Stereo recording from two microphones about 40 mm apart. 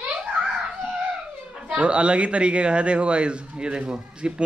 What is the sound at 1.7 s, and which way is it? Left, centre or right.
Speech, right.